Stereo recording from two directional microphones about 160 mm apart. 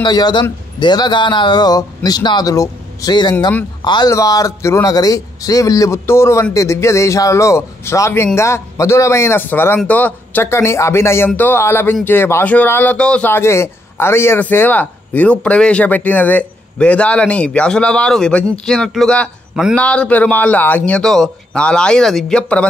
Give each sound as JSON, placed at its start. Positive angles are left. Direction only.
{"t": 0.0, "sound": "a man's voice", "side_deg": 25}